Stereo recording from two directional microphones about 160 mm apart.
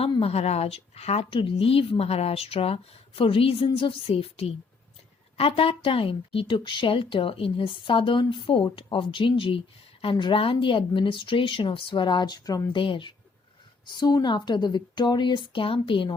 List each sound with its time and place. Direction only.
0.0 s a woman's voice: 35° left (ahead or behind)